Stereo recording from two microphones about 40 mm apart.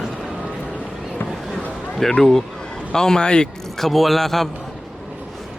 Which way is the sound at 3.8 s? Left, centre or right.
Centre.